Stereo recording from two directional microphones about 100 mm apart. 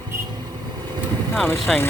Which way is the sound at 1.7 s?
Centre (ahead or behind).